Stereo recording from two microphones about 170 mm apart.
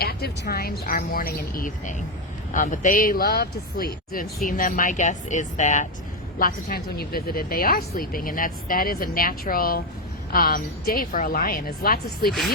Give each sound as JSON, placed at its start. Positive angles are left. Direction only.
{"t": 0.0, "sound": "speech", "side_deg": 65}
{"t": 6.4, "sound": "speech", "side_deg": 60}